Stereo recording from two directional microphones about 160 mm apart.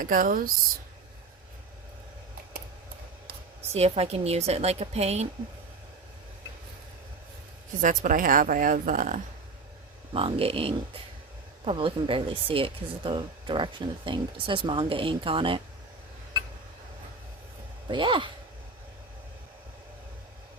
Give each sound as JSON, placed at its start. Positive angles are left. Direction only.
{"t": 0.0, "sound": "a woman's voice", "side_deg": -60}
{"t": 3.2, "sound": "a woman's voice", "side_deg": -40}
{"t": 7.8, "sound": "a woman's voice", "side_deg": -55}
{"t": 10.1, "sound": "speech", "side_deg": -35}
{"t": 17.8, "sound": "speech", "side_deg": -30}